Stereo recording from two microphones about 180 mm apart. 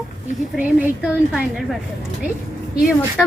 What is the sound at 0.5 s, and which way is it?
Speech, 5° right (ahead or behind).